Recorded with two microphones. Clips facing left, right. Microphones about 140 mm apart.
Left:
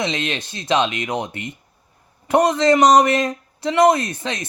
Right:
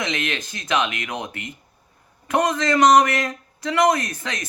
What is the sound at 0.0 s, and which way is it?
A man's voice, 30° left (ahead or behind).